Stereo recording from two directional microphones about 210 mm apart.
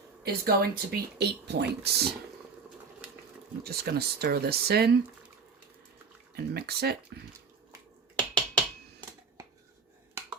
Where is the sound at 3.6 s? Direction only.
50° right (ahead or behind).